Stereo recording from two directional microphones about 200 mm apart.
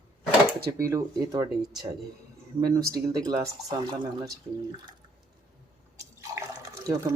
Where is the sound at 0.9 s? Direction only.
15° right (ahead or behind).